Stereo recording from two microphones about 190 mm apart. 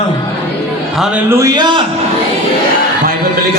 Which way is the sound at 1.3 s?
15° right (ahead or behind).